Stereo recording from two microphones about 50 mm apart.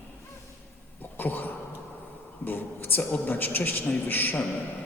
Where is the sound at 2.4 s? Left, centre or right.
Left.